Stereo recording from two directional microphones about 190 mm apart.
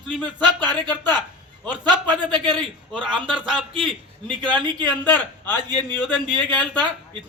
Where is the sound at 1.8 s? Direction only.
25° right (ahead or behind).